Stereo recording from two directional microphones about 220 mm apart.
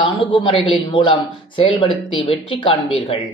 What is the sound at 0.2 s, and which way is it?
Speech, 20° left (ahead or behind).